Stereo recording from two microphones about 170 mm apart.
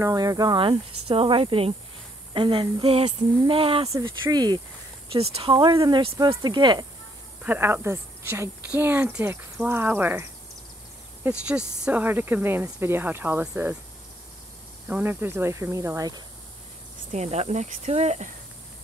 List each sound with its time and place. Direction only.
0.0 s speech: 20° right (ahead or behind)
7.4 s speech: 10° right (ahead or behind)
11.2 s speech: 5° right (ahead or behind)
14.9 s speech: 10° right (ahead or behind)
17.1 s speech: 40° right (ahead or behind)